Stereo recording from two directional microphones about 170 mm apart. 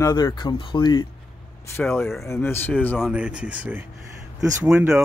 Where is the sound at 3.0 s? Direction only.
5° right (ahead or behind).